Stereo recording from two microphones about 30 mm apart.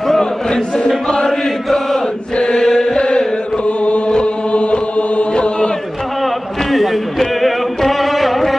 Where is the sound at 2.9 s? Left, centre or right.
Left.